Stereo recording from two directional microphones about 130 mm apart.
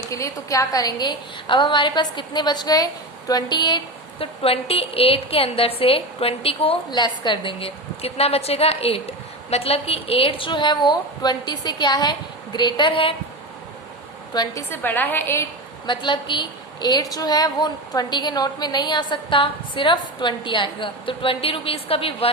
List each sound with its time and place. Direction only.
0.1 s a woman's voice: 25° left (ahead or behind)
4.4 s a woman's voice: 50° left (ahead or behind)
14.3 s a woman's voice: 20° left (ahead or behind)
15.9 s a woman's voice: 35° left (ahead or behind)